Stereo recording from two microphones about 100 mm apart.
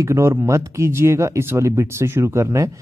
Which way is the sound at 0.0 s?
30° right (ahead or behind).